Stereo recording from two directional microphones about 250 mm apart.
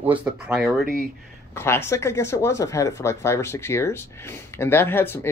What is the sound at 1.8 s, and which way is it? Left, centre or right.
Speech, centre.